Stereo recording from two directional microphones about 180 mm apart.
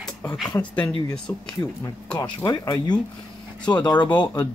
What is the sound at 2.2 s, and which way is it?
Speech, 20° left (ahead or behind).